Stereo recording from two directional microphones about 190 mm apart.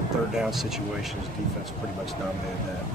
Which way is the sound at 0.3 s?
Centre (ahead or behind).